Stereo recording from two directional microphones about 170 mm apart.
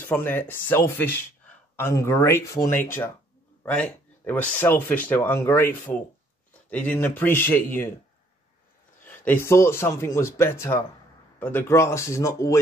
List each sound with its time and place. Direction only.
0.0 s speech: 10° left (ahead or behind)
9.0 s speech: 10° left (ahead or behind)